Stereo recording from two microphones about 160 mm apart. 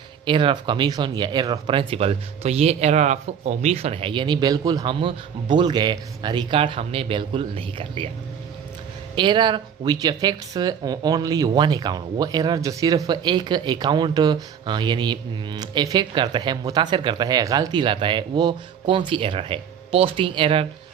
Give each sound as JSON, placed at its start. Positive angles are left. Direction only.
{"t": 0.3, "sound": "speech", "side_deg": -30}
{"t": 9.1, "sound": "speech", "side_deg": -30}